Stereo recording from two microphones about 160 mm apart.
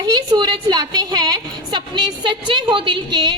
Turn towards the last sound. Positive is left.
turn(degrees=-30)  # may be behind; listen again after turning